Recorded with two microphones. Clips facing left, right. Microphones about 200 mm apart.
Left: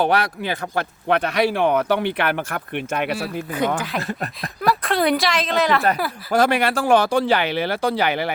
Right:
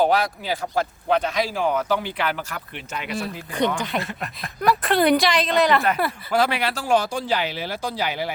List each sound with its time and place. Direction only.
0.0 s speech: 65° left (ahead or behind)
4.6 s a woman's voice: centre (ahead or behind)
6.3 s speech: 45° left (ahead or behind)